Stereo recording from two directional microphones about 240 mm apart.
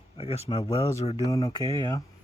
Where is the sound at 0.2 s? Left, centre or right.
Left.